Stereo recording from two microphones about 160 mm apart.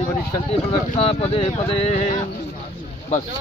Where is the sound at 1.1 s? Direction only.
35° left (ahead or behind).